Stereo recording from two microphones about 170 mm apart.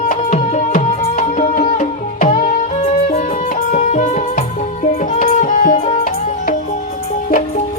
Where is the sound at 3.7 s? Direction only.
45° left (ahead or behind).